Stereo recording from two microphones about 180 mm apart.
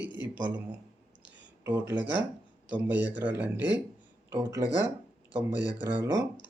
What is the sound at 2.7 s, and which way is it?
Speech, 10° right (ahead or behind).